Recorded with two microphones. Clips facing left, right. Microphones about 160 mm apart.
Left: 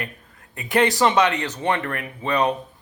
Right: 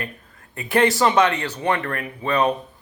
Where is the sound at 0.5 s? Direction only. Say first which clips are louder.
Right 1 dB; 15° left (ahead or behind).